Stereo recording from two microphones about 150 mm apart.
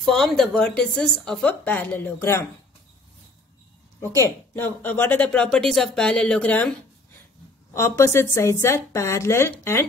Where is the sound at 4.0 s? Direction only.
20° left (ahead or behind).